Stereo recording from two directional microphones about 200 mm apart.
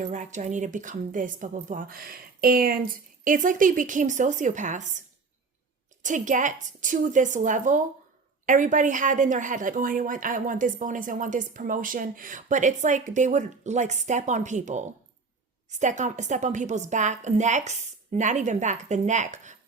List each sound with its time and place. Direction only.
0.0 s a woman's voice: 40° right (ahead or behind)